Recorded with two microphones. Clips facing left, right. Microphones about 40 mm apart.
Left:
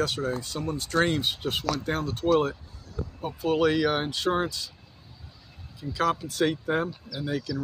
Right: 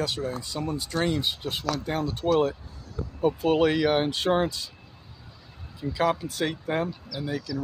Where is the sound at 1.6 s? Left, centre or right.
Centre.